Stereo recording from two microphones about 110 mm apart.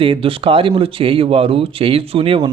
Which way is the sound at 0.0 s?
55° right (ahead or behind).